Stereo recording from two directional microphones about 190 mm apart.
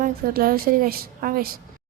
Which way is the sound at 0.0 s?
50° right (ahead or behind).